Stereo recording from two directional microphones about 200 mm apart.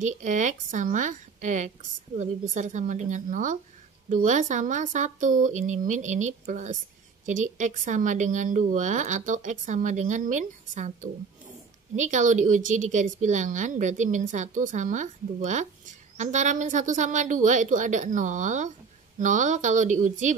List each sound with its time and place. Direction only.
0.0 s a woman's voice: 40° right (ahead or behind)